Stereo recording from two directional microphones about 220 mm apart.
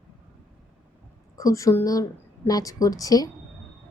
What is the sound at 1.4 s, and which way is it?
A woman's voice, 15° left (ahead or behind).